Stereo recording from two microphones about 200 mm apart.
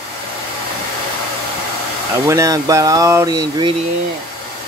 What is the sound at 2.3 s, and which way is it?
Speech, 15° right (ahead or behind).